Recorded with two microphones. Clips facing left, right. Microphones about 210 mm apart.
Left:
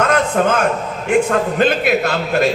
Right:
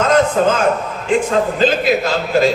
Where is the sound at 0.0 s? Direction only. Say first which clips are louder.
Right 2 dB; 60° left (ahead or behind).